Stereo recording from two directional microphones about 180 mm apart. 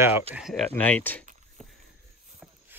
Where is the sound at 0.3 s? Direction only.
Centre (ahead or behind).